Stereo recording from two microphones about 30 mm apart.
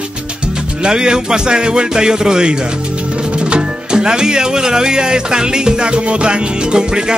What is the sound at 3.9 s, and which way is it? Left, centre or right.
Speech, right.